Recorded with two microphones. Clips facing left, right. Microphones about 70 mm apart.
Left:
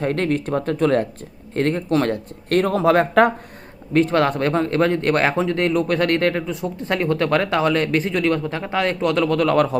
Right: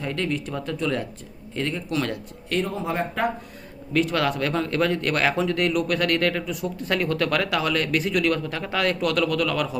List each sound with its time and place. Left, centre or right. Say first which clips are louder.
0.0 s speech: left 6 dB; left
3.9 s speech: left 5 dB; left